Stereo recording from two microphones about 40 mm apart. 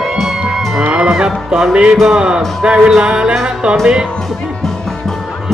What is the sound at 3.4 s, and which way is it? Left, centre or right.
Speech, right.